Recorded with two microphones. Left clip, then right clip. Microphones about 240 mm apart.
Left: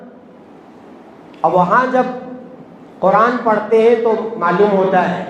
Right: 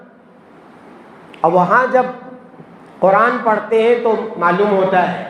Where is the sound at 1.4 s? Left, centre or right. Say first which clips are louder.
Even; right.